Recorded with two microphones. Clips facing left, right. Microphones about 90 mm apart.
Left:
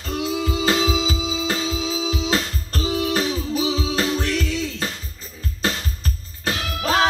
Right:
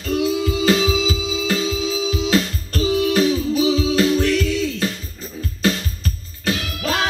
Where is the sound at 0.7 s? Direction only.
35° left (ahead or behind).